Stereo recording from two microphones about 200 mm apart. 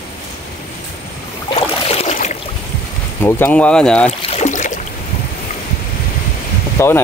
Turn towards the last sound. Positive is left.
turn(degrees=10)  # may be behind; listen again after turning